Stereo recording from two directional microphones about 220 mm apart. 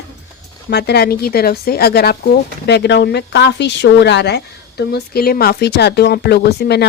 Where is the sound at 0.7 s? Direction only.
50° left (ahead or behind).